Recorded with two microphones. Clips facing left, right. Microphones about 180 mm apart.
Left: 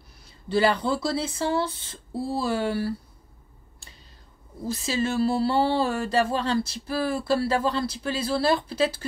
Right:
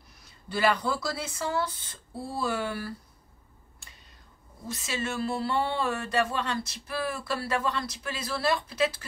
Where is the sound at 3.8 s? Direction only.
30° left (ahead or behind).